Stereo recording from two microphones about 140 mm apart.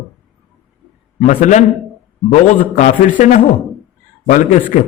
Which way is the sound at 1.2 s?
60° left (ahead or behind).